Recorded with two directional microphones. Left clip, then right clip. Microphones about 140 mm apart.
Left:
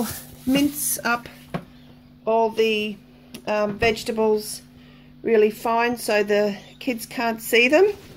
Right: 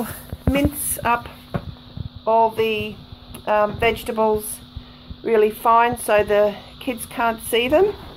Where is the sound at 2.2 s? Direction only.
5° right (ahead or behind).